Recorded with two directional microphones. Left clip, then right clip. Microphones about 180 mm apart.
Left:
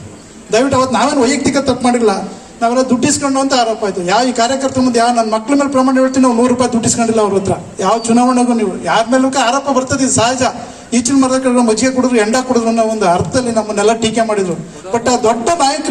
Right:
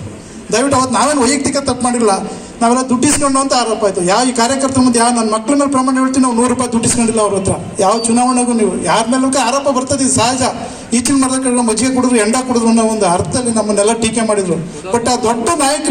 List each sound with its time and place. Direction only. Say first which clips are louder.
0.5 s a man's voice: left 1 dB; 40° right (ahead or behind)